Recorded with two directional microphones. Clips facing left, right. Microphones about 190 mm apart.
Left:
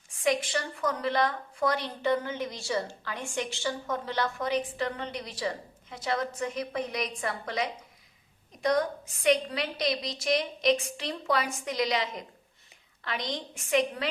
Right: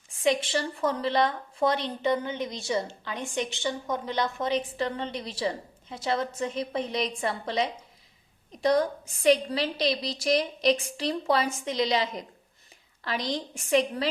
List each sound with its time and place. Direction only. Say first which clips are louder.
0.2 s a woman's voice: right 2 dB; 25° right (ahead or behind)
9.2 s a woman's voice: right 3 dB; 30° right (ahead or behind)